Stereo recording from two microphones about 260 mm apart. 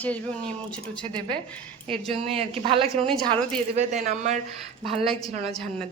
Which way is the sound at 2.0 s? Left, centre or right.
Right.